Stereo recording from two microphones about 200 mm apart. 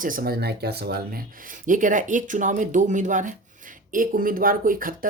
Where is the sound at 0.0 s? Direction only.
45° right (ahead or behind).